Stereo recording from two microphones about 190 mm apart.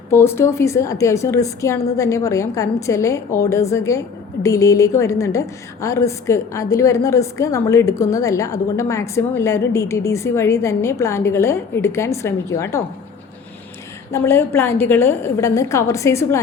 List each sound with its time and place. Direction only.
0.1 s a woman's voice: 15° left (ahead or behind)
14.1 s a woman's voice: 10° left (ahead or behind)